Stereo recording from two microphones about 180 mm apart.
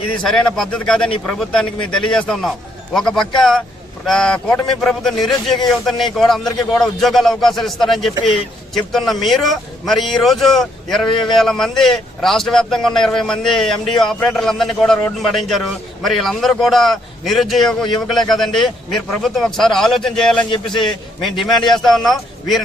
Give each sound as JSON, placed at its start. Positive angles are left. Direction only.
{"t": 0.2, "sound": "a man's voice", "side_deg": 5}
{"t": 11.1, "sound": "a man's voice", "side_deg": 30}
{"t": 11.3, "sound": "a man's voice", "side_deg": 0}
{"t": 20.5, "sound": "a man's voice", "side_deg": 25}
{"t": 20.8, "sound": "a man's voice", "side_deg": 0}